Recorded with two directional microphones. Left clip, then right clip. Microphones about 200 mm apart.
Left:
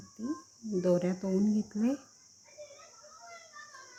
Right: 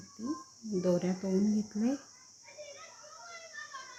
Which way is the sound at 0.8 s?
10° left (ahead or behind).